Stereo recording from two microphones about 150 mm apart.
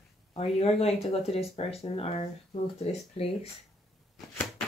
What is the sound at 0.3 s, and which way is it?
Speech, 40° left (ahead or behind).